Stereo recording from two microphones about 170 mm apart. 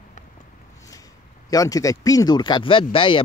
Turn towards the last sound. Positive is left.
turn(degrees=30)  # may be behind; listen again after turning